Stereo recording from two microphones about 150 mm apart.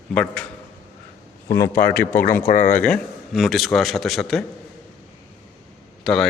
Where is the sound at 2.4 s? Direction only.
60° left (ahead or behind).